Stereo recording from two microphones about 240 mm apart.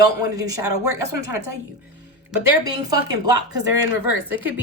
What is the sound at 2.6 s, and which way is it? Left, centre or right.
A woman's voice, centre.